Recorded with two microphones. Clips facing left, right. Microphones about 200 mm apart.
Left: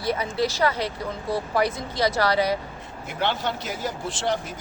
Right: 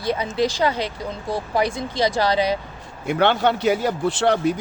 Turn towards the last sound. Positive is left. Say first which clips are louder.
# right 8 dB
turn(degrees=-65)  # may be behind; listen again after turning